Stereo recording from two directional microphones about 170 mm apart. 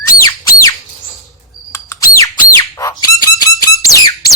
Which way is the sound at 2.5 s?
20° left (ahead or behind).